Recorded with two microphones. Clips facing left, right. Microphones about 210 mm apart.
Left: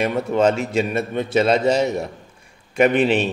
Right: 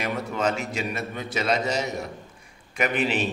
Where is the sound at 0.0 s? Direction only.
25° left (ahead or behind).